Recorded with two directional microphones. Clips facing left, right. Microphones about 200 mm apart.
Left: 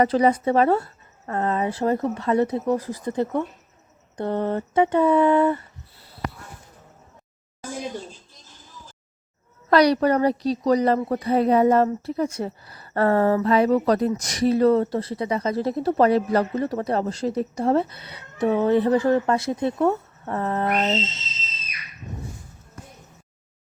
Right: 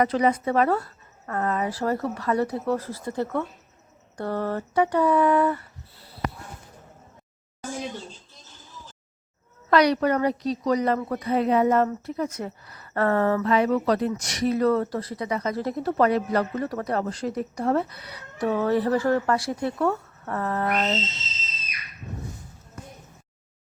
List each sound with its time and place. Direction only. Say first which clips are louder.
0.0 s speech: left 3 dB; 30° left (ahead or behind)
9.6 s speech: left 3 dB; 35° left (ahead or behind)